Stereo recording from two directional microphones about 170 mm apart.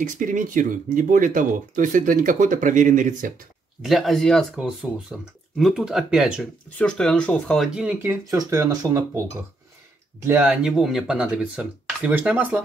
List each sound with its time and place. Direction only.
0.0 s speech: 50° right (ahead or behind)
3.8 s speech: centre (ahead or behind)
6.8 s speech: 5° left (ahead or behind); by 9.2 s 20° right (ahead or behind)
10.2 s speech: 10° right (ahead or behind)